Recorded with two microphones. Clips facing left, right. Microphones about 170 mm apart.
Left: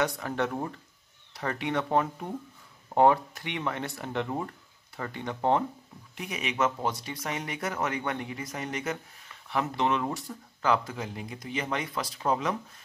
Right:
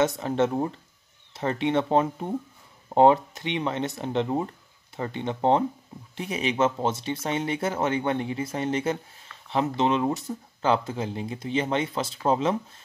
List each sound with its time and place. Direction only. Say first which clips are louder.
0.0 s speech: right 6 dB; 25° right (ahead or behind)